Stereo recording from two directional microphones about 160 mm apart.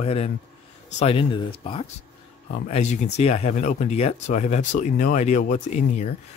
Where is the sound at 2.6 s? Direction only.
45° left (ahead or behind).